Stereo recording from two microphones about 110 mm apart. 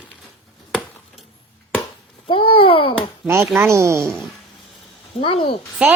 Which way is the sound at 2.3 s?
50° left (ahead or behind).